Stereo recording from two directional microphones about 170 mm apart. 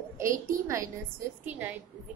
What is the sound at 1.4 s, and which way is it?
Speech, 10° right (ahead or behind).